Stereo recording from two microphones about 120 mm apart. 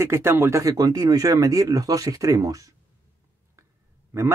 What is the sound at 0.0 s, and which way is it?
Speech, 20° right (ahead or behind).